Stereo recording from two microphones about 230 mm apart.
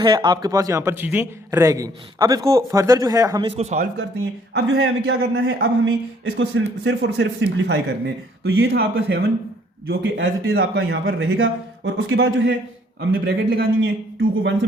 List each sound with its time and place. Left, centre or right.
0.0 s a man's voice: centre
4.5 s a man's voice: right